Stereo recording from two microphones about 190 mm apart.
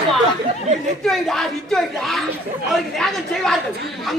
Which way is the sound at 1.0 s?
Centre (ahead or behind).